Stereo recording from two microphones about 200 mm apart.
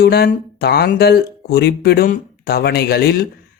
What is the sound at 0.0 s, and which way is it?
Speech, 55° left (ahead or behind).